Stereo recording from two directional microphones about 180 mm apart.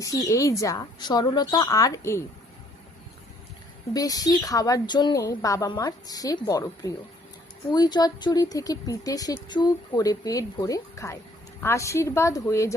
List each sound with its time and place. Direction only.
0.0 s speech: 20° left (ahead or behind)
3.9 s a woman's voice: 20° left (ahead or behind)